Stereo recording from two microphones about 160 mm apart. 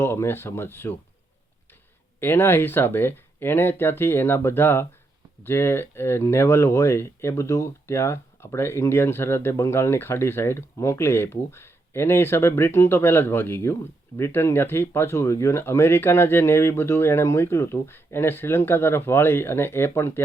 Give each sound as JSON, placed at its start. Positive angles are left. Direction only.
{"t": 0.0, "sound": "speech", "side_deg": 15}
{"t": 2.2, "sound": "speech", "side_deg": 15}